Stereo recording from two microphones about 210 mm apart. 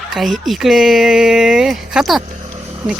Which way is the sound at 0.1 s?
Centre (ahead or behind).